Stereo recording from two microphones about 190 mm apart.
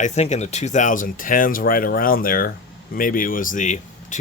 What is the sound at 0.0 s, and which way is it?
Speech, 35° left (ahead or behind).